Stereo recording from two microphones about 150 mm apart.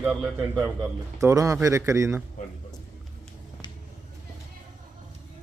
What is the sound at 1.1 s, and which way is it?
Speech, 25° right (ahead or behind).